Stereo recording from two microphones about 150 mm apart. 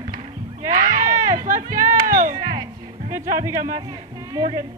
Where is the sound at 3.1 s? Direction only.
20° right (ahead or behind).